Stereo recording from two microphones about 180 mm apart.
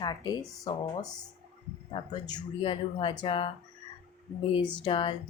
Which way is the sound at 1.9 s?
30° left (ahead or behind).